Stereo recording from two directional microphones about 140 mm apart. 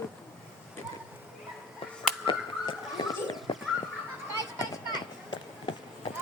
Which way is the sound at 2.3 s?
35° left (ahead or behind).